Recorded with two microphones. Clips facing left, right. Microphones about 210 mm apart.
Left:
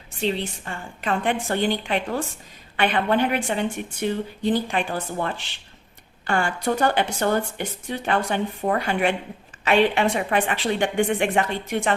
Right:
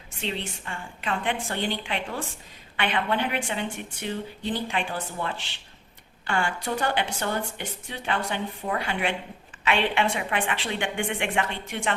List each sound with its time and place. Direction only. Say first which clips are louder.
0.2 s a woman's voice: left 7 dB; 40° left (ahead or behind)